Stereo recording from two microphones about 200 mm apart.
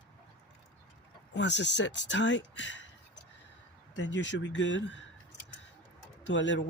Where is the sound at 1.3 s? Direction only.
60° left (ahead or behind).